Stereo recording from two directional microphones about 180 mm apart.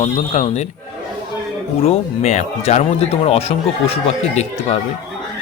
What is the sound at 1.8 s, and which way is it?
Speech, 35° left (ahead or behind).